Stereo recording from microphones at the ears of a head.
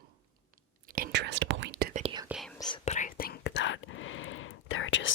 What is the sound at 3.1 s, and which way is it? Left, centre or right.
Whispering, left.